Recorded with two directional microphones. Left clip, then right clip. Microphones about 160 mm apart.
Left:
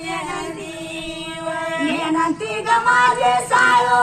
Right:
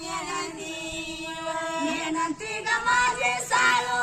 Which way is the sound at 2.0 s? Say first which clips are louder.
Left 8 dB; 20° right (ahead or behind).